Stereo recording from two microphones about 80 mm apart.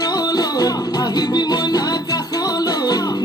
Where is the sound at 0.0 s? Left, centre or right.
Left.